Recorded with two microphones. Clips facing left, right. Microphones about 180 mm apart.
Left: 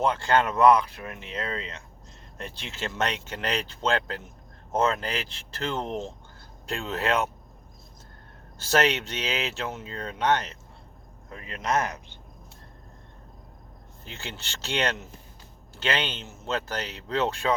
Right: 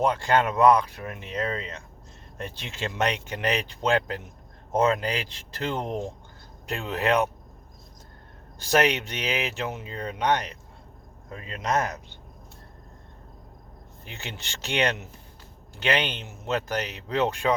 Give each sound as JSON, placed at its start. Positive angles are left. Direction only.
{"t": 0.0, "sound": "speech", "side_deg": -15}
{"t": 8.5, "sound": "speech", "side_deg": -15}
{"t": 14.0, "sound": "speech", "side_deg": -15}